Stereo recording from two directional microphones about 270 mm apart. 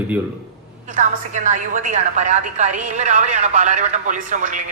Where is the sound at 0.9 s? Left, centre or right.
Right.